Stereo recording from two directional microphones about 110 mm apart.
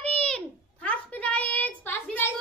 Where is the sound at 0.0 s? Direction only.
10° left (ahead or behind).